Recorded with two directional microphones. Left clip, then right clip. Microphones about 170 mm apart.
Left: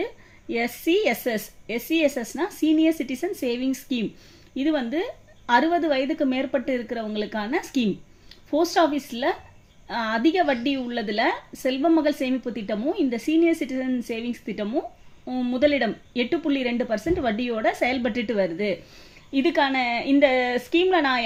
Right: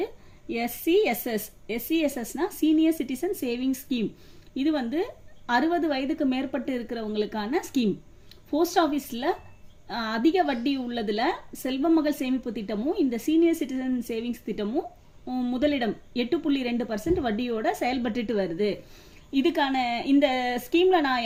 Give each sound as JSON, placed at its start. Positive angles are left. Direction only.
{"t": 0.0, "sound": "a woman's voice", "side_deg": 30}